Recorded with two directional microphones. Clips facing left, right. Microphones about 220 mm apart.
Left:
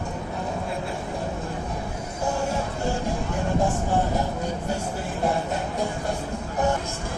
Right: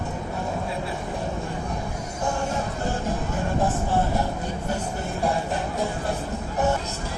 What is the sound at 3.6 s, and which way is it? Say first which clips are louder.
Vehicle: even; 15° left (ahead or behind).